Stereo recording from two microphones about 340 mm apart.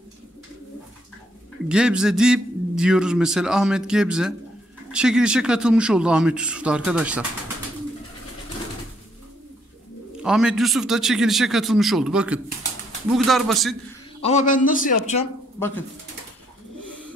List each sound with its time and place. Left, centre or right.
1.7 s a man's voice: centre
10.2 s a man's voice: centre
14.2 s speech: left